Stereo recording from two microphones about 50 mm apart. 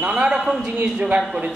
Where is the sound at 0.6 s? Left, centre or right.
Right.